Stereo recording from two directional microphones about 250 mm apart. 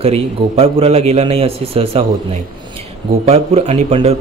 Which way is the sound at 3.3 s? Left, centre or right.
Right.